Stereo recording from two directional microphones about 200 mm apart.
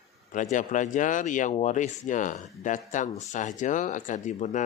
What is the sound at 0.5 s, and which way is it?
Speech, 40° left (ahead or behind).